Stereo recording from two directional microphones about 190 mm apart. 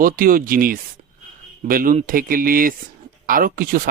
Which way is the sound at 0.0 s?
45° right (ahead or behind).